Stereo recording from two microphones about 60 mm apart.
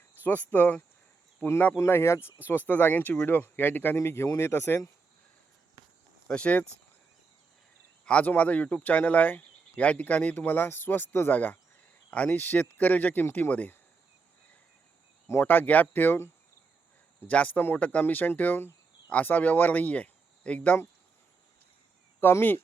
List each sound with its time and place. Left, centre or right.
0.2 s speech: left
1.8 s speech: left
2.6 s speech: left
3.9 s speech: left
6.2 s speech: centre
8.0 s speech: centre
15.4 s speech: left
17.2 s speech: left
22.2 s speech: left